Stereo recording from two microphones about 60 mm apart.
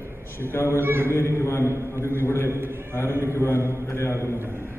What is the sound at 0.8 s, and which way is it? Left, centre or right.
Speech, right.